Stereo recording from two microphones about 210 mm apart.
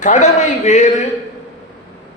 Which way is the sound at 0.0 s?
35° left (ahead or behind).